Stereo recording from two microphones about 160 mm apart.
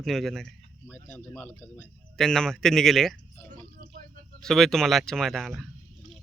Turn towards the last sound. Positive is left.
turn(degrees=0)  # may be behind; listen again after turning